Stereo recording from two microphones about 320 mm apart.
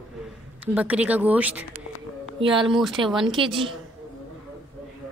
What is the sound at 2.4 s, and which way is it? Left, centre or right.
A woman's voice, centre.